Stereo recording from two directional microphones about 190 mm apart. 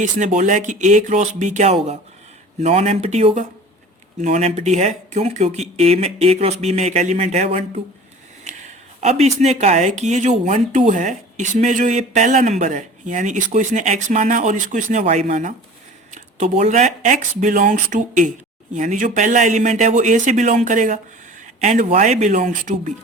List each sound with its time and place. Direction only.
0.0 s speech: 40° right (ahead or behind)
8.5 s a sound: 40° right (ahead or behind)
9.0 s speech: 35° right (ahead or behind)